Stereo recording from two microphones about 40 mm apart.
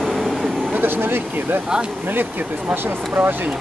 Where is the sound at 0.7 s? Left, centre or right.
Right.